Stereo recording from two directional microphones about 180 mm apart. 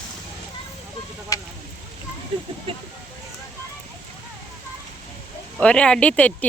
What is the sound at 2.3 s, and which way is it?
Speech, 25° right (ahead or behind).